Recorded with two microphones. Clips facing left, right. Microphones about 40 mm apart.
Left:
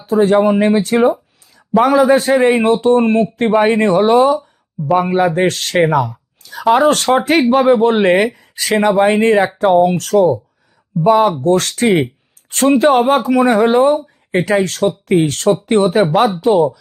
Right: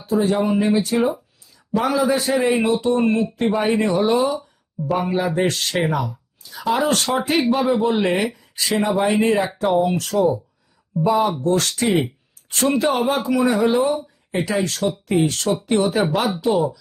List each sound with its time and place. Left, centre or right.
0.1 s speech: left